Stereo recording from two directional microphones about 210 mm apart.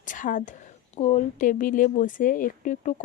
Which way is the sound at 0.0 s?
40° left (ahead or behind).